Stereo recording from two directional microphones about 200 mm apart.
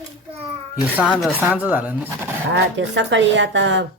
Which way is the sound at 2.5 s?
65° right (ahead or behind).